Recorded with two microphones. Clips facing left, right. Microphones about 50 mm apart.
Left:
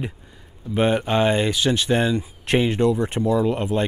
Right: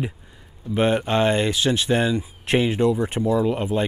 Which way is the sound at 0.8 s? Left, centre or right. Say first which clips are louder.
Even; centre.